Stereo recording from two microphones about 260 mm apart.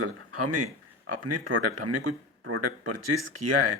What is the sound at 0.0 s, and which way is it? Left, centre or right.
Speech, right.